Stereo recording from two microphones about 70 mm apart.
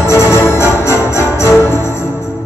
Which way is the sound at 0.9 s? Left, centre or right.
Right.